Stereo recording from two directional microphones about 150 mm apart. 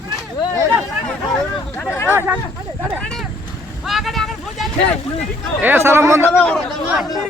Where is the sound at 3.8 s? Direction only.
Centre (ahead or behind).